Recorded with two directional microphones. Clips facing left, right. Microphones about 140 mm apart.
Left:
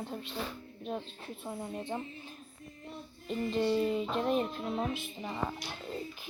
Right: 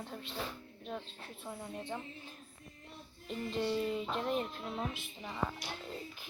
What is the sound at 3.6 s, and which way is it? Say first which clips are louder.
Speech: left 5 dB; 25° left (ahead or behind).